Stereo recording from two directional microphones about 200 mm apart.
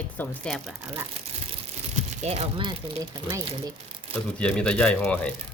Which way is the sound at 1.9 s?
30° right (ahead or behind).